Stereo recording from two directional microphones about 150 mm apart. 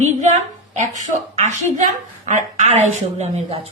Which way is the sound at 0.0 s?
50° right (ahead or behind).